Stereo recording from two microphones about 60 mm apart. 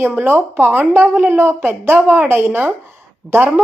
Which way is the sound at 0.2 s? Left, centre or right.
Right.